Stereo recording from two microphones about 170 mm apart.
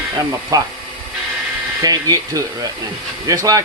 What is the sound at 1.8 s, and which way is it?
Speech, 20° right (ahead or behind).